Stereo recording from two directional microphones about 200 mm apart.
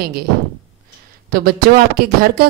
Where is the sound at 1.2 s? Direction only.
45° right (ahead or behind).